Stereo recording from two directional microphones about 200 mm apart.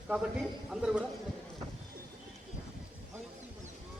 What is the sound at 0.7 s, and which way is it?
Speech, centre (ahead or behind).